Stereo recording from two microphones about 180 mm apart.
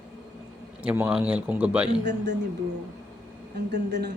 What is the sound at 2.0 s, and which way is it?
Speech, 75° right (ahead or behind).